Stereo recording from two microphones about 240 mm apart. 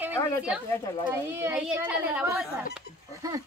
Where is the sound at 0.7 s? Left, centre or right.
Centre.